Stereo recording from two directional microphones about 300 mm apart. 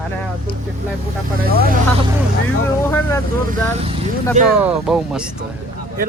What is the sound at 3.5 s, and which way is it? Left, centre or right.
Speech, centre.